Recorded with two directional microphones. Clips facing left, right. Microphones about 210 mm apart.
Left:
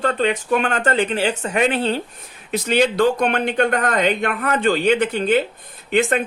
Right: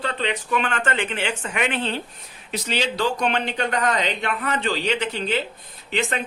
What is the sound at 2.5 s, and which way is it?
Speech, 50° left (ahead or behind).